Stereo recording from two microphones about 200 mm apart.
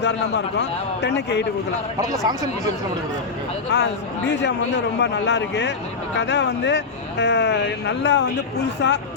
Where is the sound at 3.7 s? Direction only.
60° left (ahead or behind).